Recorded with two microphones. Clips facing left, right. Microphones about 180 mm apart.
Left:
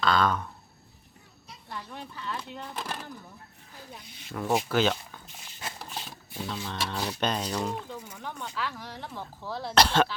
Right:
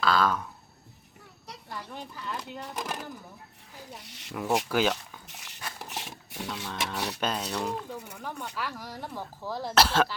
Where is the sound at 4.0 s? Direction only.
80° right.